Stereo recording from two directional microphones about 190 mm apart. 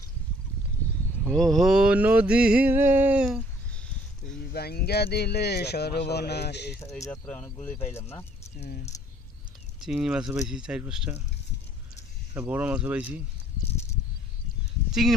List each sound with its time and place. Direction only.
1.2 s mantra: 5° left (ahead or behind)
4.5 s a sound: 55° left (ahead or behind)
6.8 s speech: 15° left (ahead or behind)
9.8 s mantra: 5° right (ahead or behind)
12.4 s speech: 10° right (ahead or behind)
14.9 s speech: centre (ahead or behind)